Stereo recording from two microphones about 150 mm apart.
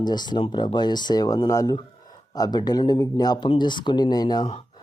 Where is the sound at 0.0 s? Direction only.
30° left (ahead or behind).